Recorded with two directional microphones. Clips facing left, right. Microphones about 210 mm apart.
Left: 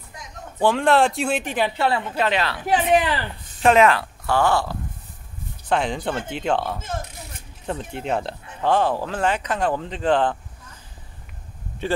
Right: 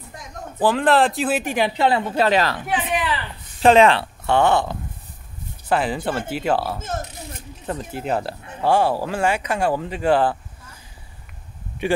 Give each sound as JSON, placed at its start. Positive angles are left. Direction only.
{"t": 0.6, "sound": "speech", "side_deg": 0}
{"t": 2.0, "sound": "speech", "side_deg": -35}
{"t": 3.6, "sound": "speech", "side_deg": -30}
{"t": 5.7, "sound": "speech", "side_deg": -5}
{"t": 11.8, "sound": "speech", "side_deg": -15}